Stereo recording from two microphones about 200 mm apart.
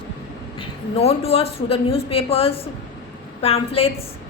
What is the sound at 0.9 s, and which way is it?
A woman's voice, 30° left (ahead or behind).